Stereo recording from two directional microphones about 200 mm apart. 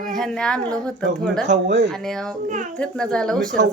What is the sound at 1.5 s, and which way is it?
Speech, 65° right (ahead or behind).